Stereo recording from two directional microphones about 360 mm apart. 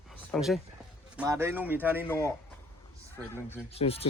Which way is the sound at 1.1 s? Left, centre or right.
Centre.